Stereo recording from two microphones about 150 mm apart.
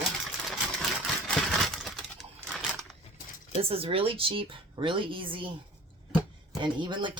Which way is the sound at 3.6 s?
40° right (ahead or behind).